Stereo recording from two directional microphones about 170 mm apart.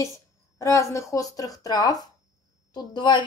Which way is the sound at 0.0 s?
15° left (ahead or behind).